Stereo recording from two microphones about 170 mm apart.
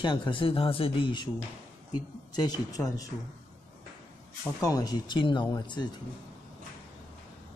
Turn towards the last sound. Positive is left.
turn(degrees=25)  # may be behind; listen again after turning